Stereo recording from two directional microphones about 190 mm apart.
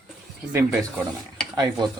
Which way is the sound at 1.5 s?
20° right (ahead or behind).